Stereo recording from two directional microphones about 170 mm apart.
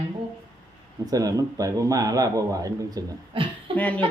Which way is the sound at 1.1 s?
20° right (ahead or behind).